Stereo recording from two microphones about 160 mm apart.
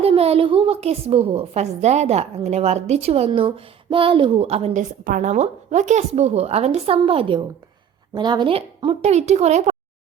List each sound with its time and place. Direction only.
0.0 s a woman's voice: 40° right (ahead or behind)